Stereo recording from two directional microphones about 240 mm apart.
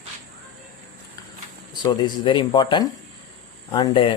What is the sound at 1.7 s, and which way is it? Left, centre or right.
Speech, centre.